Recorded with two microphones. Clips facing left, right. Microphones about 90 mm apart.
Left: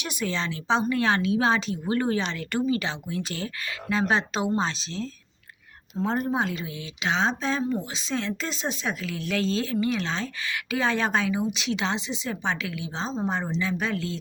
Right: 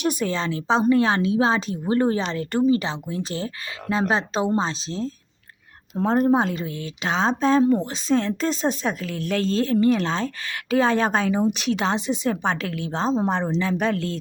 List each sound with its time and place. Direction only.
0.0 s speech: 40° right (ahead or behind)
7.6 s speech: 65° right (ahead or behind)
8.0 s speech: 45° right (ahead or behind); by 13.4 s 60° right (ahead or behind)
13.6 s speech: 45° right (ahead or behind)